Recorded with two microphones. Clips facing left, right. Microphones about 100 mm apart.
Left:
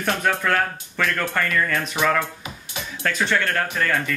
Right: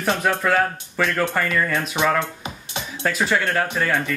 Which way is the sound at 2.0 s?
20° right (ahead or behind).